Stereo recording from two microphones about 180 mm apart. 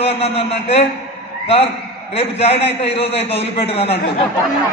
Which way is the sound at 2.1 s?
35° left (ahead or behind).